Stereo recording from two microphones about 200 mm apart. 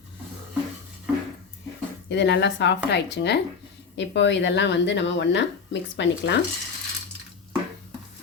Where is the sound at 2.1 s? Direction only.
60° left (ahead or behind).